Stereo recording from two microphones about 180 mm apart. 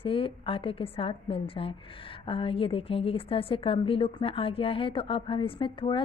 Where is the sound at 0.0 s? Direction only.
30° left (ahead or behind).